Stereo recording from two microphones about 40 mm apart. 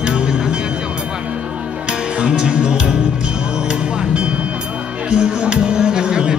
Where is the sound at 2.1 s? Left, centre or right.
Right.